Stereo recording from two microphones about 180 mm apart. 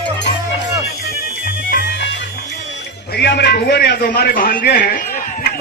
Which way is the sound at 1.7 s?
70° left (ahead or behind).